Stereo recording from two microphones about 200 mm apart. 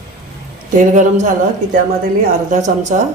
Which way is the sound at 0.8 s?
40° right (ahead or behind).